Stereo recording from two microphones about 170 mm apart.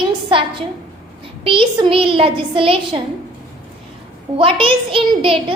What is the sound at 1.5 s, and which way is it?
A woman's voice, 30° right (ahead or behind).